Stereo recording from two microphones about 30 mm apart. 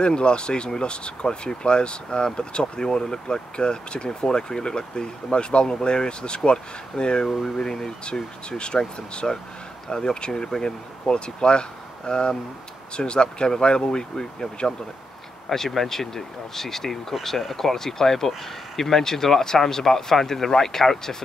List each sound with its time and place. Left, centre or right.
0.0 s speech: left
8.0 s speech: left
9.2 s speech: centre
15.5 s speech: centre